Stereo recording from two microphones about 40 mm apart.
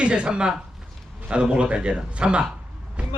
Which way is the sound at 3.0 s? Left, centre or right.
Right.